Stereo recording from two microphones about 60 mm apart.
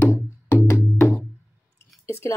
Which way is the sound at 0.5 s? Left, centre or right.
Left.